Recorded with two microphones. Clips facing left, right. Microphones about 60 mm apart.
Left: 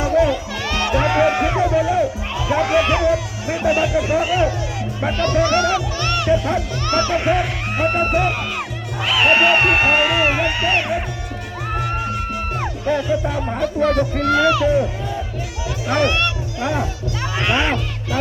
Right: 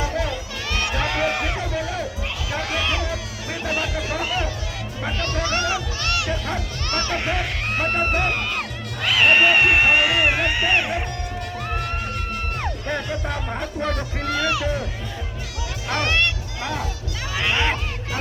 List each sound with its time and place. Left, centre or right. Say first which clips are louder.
0.0 s music: left 9 dB; left
5.1 s speech: left 9 dB; left
6.2 s music: left 8 dB; centre
7.3 s music: left 6 dB; centre
9.0 s speech: left 2 dB; centre
12.3 s music: left 4 dB; centre
13.5 s speech: left 10 dB; centre
16.6 s speech: left 8 dB; left
17.4 s a sound: left 3 dB; centre